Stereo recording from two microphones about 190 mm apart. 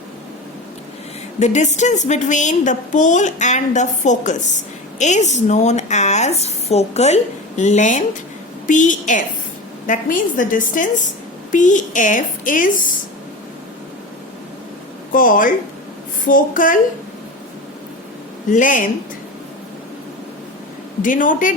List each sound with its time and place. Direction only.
1.4 s a woman's voice: 40° left (ahead or behind)
15.1 s a woman's voice: 45° left (ahead or behind)
18.5 s a woman's voice: 45° left (ahead or behind)
21.0 s a woman's voice: 45° left (ahead or behind)